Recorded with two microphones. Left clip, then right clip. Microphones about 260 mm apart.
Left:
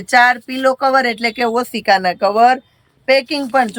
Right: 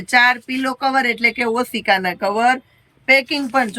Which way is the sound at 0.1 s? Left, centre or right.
Centre.